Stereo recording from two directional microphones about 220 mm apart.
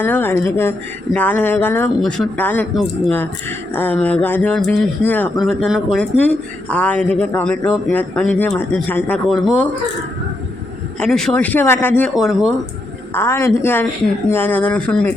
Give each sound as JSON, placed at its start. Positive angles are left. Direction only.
{"t": 0.0, "sound": "speech", "side_deg": 10}
{"t": 11.0, "sound": "speech", "side_deg": 0}
{"t": 13.1, "sound": "speech", "side_deg": 10}